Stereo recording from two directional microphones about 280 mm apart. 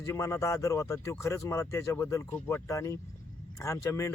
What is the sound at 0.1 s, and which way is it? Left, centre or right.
A man's voice, centre.